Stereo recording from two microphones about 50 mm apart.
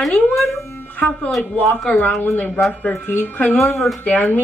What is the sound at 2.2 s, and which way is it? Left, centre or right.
Speech, left.